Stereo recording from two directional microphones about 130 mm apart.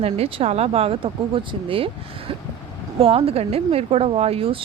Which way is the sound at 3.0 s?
50° right (ahead or behind).